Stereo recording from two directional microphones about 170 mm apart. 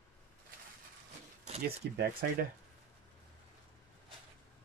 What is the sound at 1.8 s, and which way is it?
Speech, 75° right (ahead or behind).